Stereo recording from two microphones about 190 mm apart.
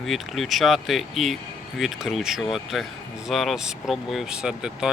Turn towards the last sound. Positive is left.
turn(degrees=-5)  # may be behind; listen again after turning